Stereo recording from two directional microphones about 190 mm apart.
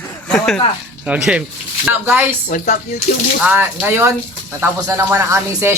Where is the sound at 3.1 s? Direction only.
40° left (ahead or behind).